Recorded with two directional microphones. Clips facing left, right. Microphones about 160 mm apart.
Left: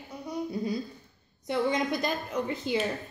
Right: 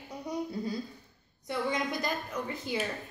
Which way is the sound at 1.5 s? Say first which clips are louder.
Left 5 dB; 20° left (ahead or behind).